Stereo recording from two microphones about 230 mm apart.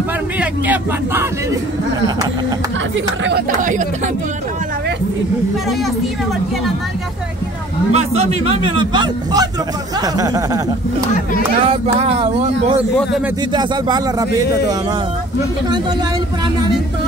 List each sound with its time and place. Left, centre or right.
0.4 s speech: centre
3.3 s speech: right
7.9 s a man's voice: right
11.5 s a man's voice: right
13.5 s a man's voice: centre